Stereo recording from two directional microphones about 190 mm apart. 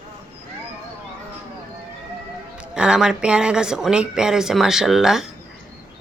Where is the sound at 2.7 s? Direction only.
5° right (ahead or behind).